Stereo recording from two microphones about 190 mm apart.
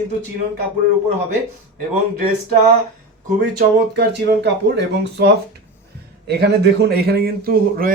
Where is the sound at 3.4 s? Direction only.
55° right (ahead or behind).